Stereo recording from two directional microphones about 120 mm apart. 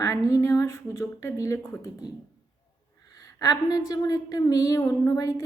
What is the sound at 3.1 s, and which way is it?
A woman's voice, 25° left (ahead or behind).